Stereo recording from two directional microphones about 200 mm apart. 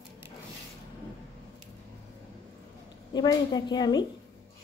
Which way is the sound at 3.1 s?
20° left (ahead or behind).